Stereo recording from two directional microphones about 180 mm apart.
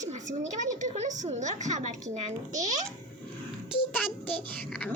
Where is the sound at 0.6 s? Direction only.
45° right (ahead or behind).